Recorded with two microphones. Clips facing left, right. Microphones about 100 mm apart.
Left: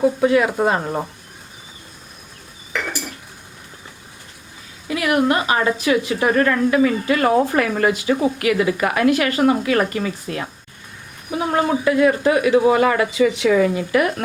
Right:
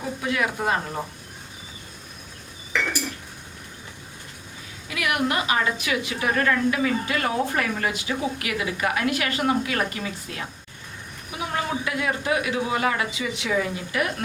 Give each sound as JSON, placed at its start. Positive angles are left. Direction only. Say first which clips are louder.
{"t": 0.0, "sound": "speech", "louder": "left 10 dB", "side_deg": 35}
{"t": 4.9, "sound": "a woman's voice", "louder": "left 7 dB", "side_deg": 35}
{"t": 10.3, "sound": "a woman's voice", "louder": "left 7 dB", "side_deg": 40}